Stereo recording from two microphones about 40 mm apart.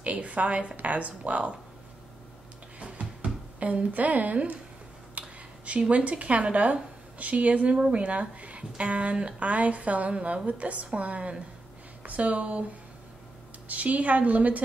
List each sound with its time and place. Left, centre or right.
0.0 s speech: right
2.8 s a sound: right
3.5 s speech: right
13.7 s speech: right